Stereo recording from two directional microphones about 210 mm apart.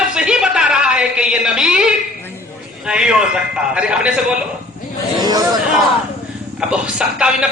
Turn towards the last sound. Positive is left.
turn(degrees=-5)  # may be behind; listen again after turning